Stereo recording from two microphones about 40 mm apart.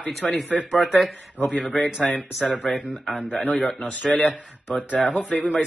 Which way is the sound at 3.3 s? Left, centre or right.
Left.